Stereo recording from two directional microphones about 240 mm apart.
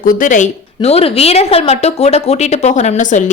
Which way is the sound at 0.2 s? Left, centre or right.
Left.